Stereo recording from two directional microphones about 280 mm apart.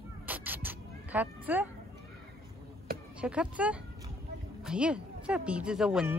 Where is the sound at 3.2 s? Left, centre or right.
Centre.